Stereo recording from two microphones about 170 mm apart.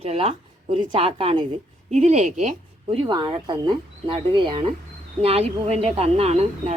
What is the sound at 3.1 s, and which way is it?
A woman's voice, 25° right (ahead or behind).